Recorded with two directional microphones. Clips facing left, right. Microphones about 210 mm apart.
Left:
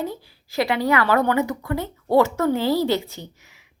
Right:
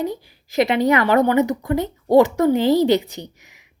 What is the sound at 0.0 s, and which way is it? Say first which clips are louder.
Speech: right 4 dB; 20° right (ahead or behind).